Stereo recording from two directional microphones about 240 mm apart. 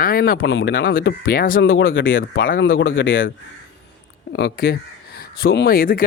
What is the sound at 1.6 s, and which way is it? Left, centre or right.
Speech, left.